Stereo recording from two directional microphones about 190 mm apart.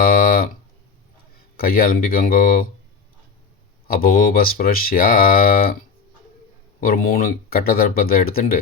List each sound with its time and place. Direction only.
0.0 s a sound: 50° left (ahead or behind)
1.5 s speech: 50° left (ahead or behind)
3.8 s speech: 50° left (ahead or behind)
6.7 s speech: 50° left (ahead or behind)